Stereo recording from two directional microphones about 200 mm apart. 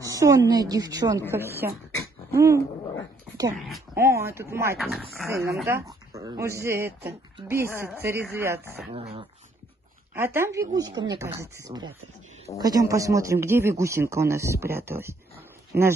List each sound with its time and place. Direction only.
0.0 s speech: 15° right (ahead or behind)
3.5 s speech: centre (ahead or behind)
3.9 s speech: 15° right (ahead or behind)
4.7 s speech: centre (ahead or behind)
5.3 s speech: 15° right (ahead or behind)
8.9 s dog: 30° right (ahead or behind)
10.1 s speech: 10° right (ahead or behind)